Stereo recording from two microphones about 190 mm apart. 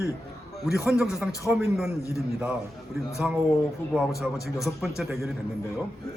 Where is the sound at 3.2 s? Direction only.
5° right (ahead or behind).